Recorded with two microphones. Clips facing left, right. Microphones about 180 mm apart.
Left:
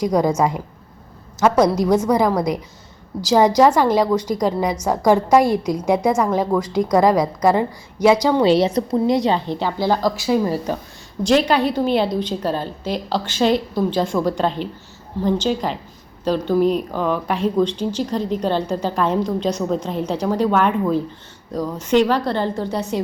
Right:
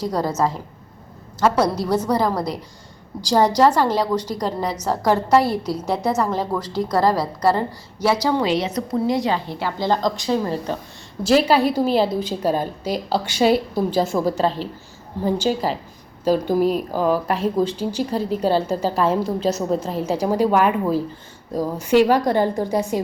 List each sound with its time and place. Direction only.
0.0 s a woman's voice: 15° left (ahead or behind)
8.4 s a woman's voice: 30° left (ahead or behind); by 10.8 s 10° left (ahead or behind)
11.2 s speech: 5° right (ahead or behind)